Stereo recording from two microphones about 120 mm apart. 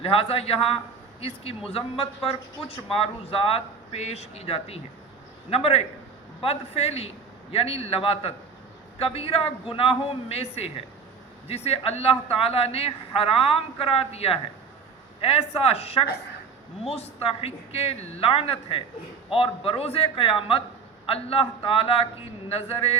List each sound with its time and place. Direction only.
0.0 s a man's voice: 55° left (ahead or behind)